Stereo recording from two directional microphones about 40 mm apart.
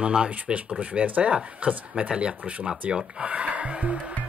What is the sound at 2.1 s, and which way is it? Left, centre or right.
Speech, centre.